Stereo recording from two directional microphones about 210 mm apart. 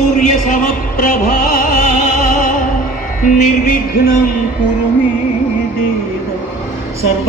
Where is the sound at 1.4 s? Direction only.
40° left (ahead or behind).